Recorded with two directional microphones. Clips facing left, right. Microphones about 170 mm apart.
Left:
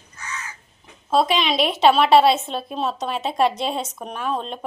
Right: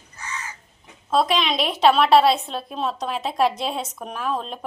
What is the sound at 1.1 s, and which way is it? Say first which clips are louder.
A woman's voice: left 1 dB; centre (ahead or behind).